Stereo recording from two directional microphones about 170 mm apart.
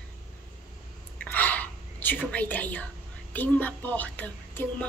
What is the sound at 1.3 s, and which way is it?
Speech, 10° left (ahead or behind).